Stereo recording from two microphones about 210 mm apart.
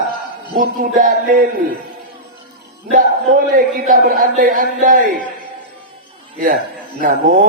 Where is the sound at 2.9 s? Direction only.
40° right (ahead or behind).